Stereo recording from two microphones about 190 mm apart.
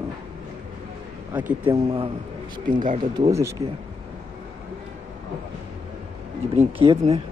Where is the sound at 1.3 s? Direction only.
10° right (ahead or behind).